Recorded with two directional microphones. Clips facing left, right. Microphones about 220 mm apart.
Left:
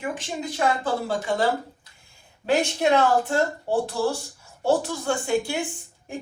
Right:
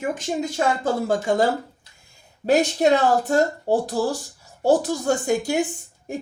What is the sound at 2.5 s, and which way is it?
A woman's voice, 40° right (ahead or behind).